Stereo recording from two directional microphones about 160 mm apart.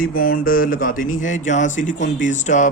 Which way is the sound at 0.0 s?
65° left (ahead or behind).